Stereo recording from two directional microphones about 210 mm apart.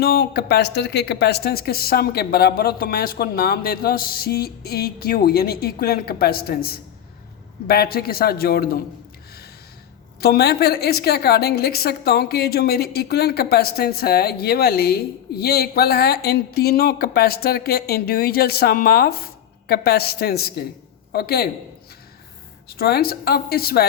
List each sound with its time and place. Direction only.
0.0 s a woman's voice: 45° left (ahead or behind)
10.2 s a woman's voice: 50° left (ahead or behind)
22.8 s a woman's voice: 50° left (ahead or behind)